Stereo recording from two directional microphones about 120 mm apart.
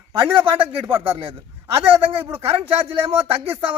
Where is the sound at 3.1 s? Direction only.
55° right (ahead or behind).